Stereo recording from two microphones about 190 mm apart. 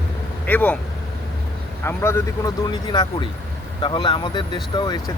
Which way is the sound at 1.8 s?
15° left (ahead or behind).